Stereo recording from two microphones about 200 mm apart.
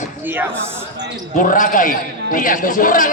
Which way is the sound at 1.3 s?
40° left (ahead or behind).